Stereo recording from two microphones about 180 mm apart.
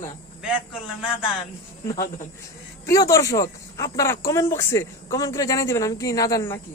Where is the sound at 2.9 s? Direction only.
15° left (ahead or behind).